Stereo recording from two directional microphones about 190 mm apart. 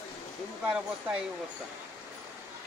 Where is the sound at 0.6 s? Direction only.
5° right (ahead or behind).